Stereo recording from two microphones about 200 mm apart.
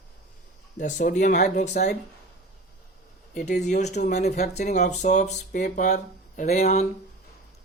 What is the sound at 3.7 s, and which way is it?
Speech, 35° left (ahead or behind).